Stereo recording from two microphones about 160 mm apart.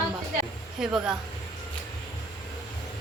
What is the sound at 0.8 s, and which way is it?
Speech, 5° right (ahead or behind).